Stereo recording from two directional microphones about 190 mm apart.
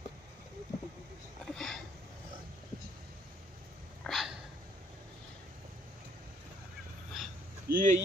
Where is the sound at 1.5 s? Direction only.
Centre (ahead or behind).